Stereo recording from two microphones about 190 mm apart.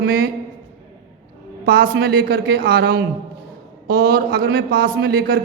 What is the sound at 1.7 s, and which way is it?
A man's voice, 55° right (ahead or behind).